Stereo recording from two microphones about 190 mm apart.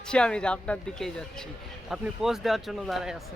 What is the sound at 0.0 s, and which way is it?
Speech, 5° left (ahead or behind).